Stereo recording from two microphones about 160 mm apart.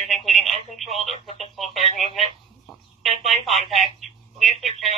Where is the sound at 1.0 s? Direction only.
40° left (ahead or behind).